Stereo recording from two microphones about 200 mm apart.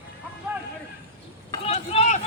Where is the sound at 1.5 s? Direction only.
30° left (ahead or behind).